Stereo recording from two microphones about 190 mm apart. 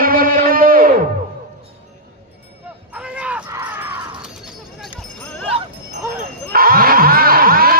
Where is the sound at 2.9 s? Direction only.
5° right (ahead or behind).